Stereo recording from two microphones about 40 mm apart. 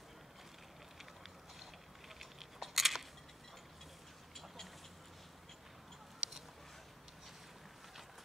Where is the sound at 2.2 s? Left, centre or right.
Centre.